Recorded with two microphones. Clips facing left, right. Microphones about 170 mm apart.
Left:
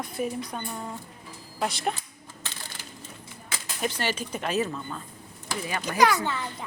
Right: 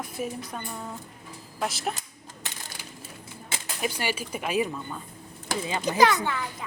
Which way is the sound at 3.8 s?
10° right (ahead or behind).